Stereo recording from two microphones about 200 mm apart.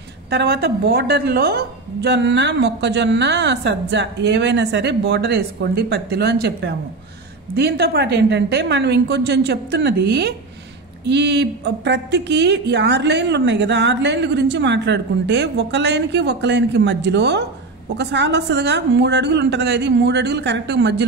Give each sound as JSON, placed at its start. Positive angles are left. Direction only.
{"t": 0.3, "sound": "a woman's voice", "side_deg": -55}